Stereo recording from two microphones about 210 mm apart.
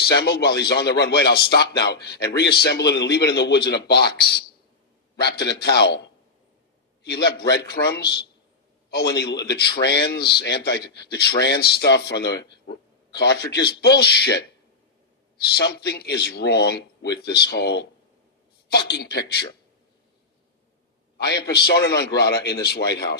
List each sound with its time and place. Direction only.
0.0 s a man's voice: 50° left (ahead or behind)
7.0 s a man's voice: 50° left (ahead or behind)
15.5 s a man's voice: 50° left (ahead or behind)
18.9 s a man's voice: 50° left (ahead or behind)
21.6 s a man's voice: 50° left (ahead or behind)